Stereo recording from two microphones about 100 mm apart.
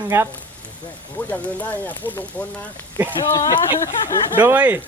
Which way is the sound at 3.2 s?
45° left (ahead or behind).